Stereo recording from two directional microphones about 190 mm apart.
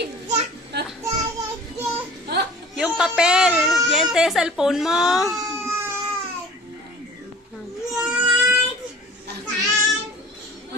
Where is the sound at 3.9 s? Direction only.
Centre (ahead or behind).